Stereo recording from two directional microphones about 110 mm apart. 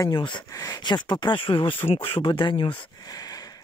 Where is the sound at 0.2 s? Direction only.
45° left (ahead or behind).